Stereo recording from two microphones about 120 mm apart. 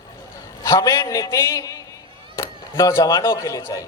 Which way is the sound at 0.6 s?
30° left (ahead or behind).